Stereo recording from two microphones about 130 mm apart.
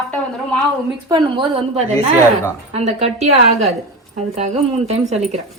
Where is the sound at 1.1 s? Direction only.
35° right (ahead or behind).